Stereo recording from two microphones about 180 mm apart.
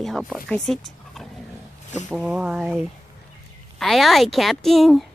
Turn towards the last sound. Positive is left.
turn(degrees=0)  # may be behind; listen again after turning